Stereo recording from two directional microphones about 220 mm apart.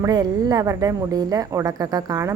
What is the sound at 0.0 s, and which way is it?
A woman's voice, 20° right (ahead or behind).